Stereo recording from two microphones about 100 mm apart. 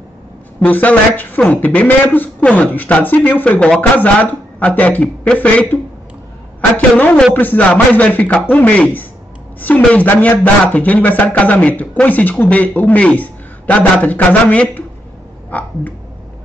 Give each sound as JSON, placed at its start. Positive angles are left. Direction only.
{"t": 0.6, "sound": "a man's voice", "side_deg": 15}
{"t": 7.0, "sound": "a man's voice", "side_deg": 15}
{"t": 15.5, "sound": "a sound", "side_deg": 15}